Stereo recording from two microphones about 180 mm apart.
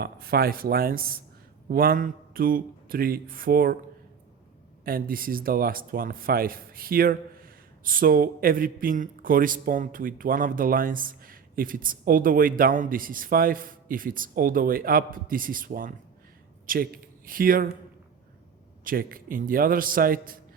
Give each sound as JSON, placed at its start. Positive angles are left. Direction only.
{"t": 0.0, "sound": "a man's voice", "side_deg": -60}
{"t": 4.9, "sound": "a man's voice", "side_deg": -55}
{"t": 18.9, "sound": "a man's voice", "side_deg": -50}